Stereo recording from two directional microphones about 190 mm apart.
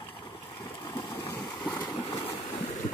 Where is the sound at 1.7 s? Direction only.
10° left (ahead or behind).